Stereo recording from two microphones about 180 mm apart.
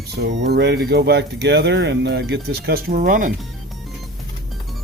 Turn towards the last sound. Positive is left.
turn(degrees=-50)  # may be behind; listen again after turning